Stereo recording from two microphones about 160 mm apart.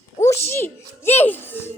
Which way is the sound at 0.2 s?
15° left (ahead or behind).